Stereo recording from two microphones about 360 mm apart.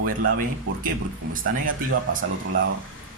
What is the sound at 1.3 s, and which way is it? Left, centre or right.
Speech, right.